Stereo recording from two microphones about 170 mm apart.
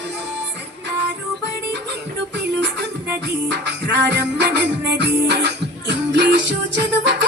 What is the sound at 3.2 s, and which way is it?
Music, 80° right.